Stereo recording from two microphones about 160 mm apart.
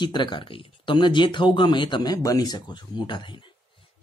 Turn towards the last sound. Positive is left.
turn(degrees=30)  # may be behind; listen again after turning